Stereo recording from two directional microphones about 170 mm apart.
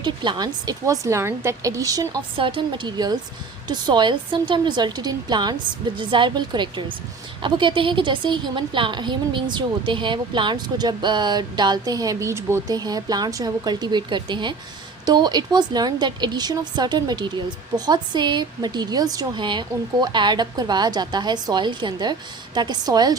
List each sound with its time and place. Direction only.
0.0 s a woman's voice: 25° right (ahead or behind)